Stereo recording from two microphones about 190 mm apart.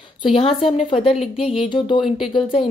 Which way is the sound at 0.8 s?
30° left (ahead or behind).